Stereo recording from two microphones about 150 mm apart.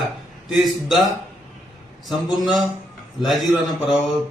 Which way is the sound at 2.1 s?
Centre (ahead or behind).